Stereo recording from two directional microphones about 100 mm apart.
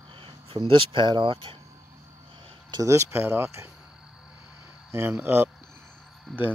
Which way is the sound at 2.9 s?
25° right (ahead or behind).